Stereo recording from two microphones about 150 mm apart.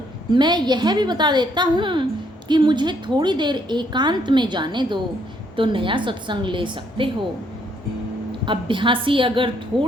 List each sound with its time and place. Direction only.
0.3 s a woman's voice: 30° right (ahead or behind)
8.4 s a woman's voice: 35° right (ahead or behind)